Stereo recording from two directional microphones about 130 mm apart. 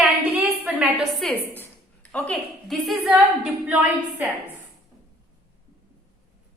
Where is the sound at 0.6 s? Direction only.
5° right (ahead or behind).